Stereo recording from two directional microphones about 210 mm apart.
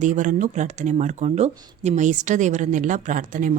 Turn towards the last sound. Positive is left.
turn(degrees=-40)  # may be behind; listen again after turning